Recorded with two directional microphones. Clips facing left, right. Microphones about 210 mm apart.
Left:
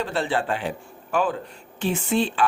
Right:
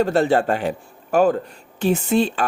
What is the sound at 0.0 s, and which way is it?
Speech, 45° right (ahead or behind).